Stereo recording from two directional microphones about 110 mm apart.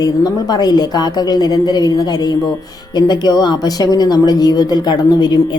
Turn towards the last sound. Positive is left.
turn(degrees=40)  # may be behind; listen again after turning